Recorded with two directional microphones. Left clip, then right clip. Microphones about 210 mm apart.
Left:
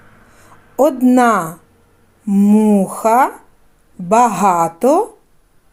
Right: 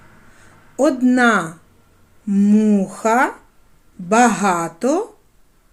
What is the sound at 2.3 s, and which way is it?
Speech, 20° left (ahead or behind).